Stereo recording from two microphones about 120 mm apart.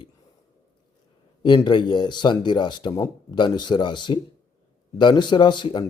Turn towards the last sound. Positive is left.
turn(degrees=40)  # may be behind; listen again after turning